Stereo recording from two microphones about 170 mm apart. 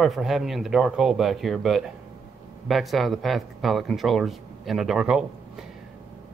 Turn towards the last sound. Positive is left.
turn(degrees=-5)  # may be behind; listen again after turning